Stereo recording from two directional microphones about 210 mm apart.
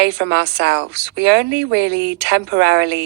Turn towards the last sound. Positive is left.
turn(degrees=-55)  # may be behind; listen again after turning